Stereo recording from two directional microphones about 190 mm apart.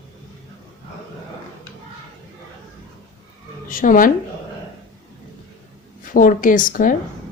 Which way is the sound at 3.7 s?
45° left (ahead or behind).